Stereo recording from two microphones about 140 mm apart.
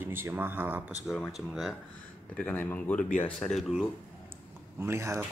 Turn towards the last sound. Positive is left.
turn(degrees=-20)  # may be behind; listen again after turning